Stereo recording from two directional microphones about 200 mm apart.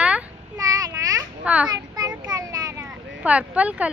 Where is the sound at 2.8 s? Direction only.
5° right (ahead or behind).